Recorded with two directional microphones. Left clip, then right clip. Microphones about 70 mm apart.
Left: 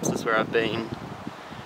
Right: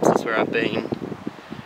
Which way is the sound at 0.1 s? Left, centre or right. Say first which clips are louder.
Right 3 dB; centre.